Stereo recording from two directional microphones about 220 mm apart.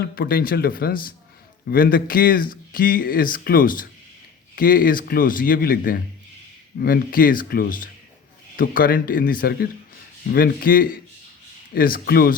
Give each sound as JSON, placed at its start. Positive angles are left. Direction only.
{"t": 0.0, "sound": "speech", "side_deg": 40}